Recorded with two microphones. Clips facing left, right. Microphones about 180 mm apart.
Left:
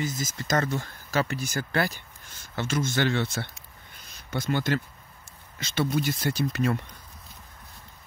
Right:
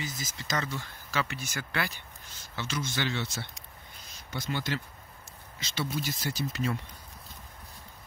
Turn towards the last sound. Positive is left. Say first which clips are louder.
# left 6 dB
turn(degrees=60)  # may be behind; listen again after turning